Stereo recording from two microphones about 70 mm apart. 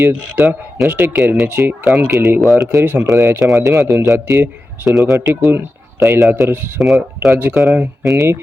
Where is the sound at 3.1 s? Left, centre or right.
Right.